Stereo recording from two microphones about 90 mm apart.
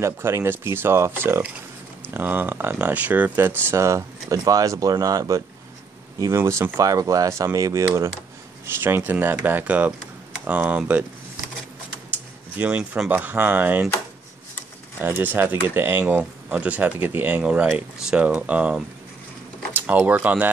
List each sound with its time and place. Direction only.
0.0 s speech: 30° right (ahead or behind)
8.8 s speech: 20° right (ahead or behind)
12.5 s speech: 15° right (ahead or behind)
15.0 s speech: 25° right (ahead or behind)